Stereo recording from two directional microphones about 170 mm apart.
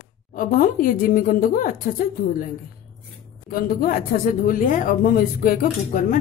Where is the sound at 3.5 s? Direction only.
55° left (ahead or behind).